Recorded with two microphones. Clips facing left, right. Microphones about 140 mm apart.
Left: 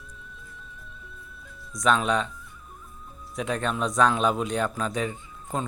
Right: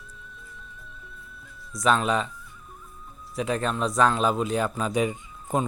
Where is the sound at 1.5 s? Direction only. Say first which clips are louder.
Right 1 dB; centre (ahead or behind).